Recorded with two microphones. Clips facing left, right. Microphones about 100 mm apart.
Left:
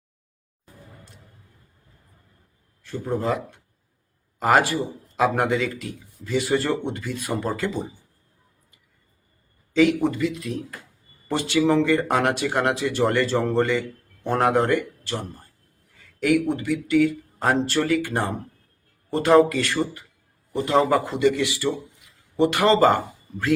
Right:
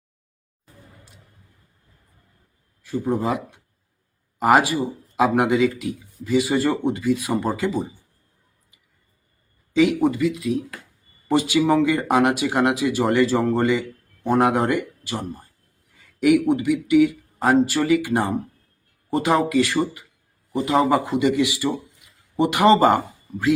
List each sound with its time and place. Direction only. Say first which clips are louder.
2.8 s a man's voice: right 3 dB; 10° right (ahead or behind)
4.4 s a man's voice: right 2 dB; 10° right (ahead or behind)
9.7 s a man's voice: right 1 dB; 5° right (ahead or behind)
16.2 s a man's voice: right 4 dB; 10° right (ahead or behind)